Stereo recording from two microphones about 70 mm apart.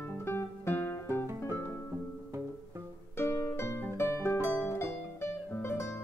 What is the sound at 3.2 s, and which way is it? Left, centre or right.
Music, left.